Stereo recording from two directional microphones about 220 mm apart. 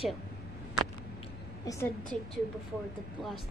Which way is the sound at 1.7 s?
15° left (ahead or behind).